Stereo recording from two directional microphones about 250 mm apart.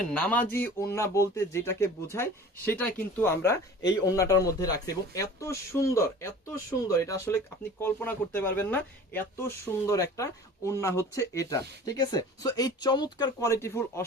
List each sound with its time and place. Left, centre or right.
0.1 s speech: centre